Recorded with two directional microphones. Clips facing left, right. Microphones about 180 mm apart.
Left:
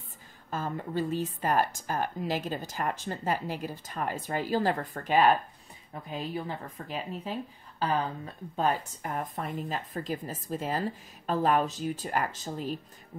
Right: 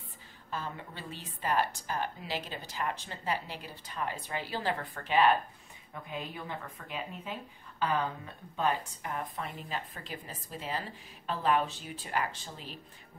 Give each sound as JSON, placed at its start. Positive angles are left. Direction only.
{"t": 0.5, "sound": "speech", "side_deg": 45}